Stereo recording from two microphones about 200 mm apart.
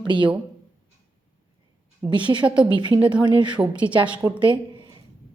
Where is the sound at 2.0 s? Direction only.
25° right (ahead or behind).